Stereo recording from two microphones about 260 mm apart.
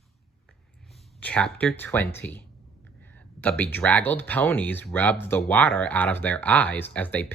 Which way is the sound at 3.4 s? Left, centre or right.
Centre.